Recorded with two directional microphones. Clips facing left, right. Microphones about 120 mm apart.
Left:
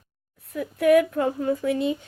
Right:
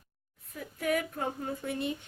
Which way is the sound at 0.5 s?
80° left.